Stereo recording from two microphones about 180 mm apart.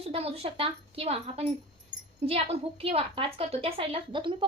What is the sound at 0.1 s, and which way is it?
A woman's voice, 35° right (ahead or behind).